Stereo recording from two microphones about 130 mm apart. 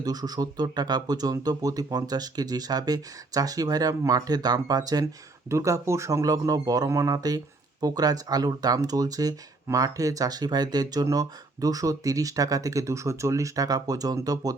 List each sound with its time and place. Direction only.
0.0 s a man's voice: 30° right (ahead or behind)